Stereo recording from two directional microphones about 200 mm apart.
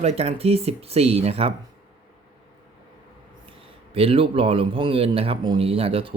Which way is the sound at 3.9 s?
30° right (ahead or behind).